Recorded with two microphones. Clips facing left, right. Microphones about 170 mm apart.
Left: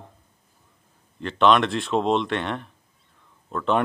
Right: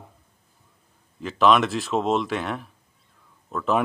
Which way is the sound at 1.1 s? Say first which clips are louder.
Even; 5° right (ahead or behind).